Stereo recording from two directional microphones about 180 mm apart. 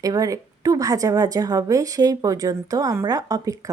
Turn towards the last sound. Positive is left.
turn(degrees=-20)  # may be behind; listen again after turning